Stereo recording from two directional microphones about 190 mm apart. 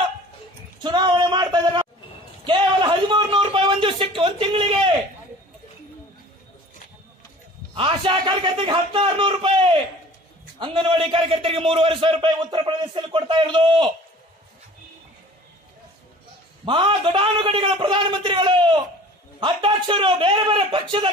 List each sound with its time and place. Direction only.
0.8 s a sound: 25° right (ahead or behind)
7.7 s a man's voice: 30° right (ahead or behind)
16.6 s a man's voice: 25° right (ahead or behind)